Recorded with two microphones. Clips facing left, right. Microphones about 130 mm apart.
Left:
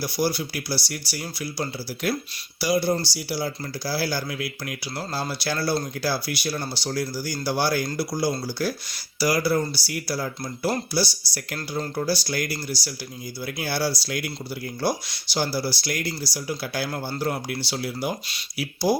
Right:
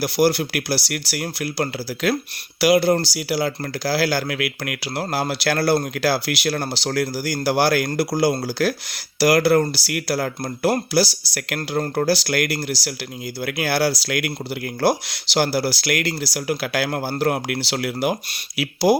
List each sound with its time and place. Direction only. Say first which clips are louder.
0.0 s speech: right 7 dB; 80° right
9.1 s speech: right 6 dB; 75° right (ahead or behind)
17.2 s speech: right 6 dB; 70° right (ahead or behind); by 18.9 s 90° right